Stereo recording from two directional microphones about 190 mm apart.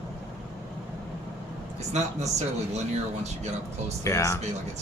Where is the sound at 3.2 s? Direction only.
35° right (ahead or behind).